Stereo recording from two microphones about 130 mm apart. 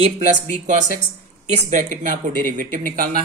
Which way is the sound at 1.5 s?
55° right (ahead or behind).